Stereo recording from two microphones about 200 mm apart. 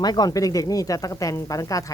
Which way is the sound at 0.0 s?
20° left (ahead or behind).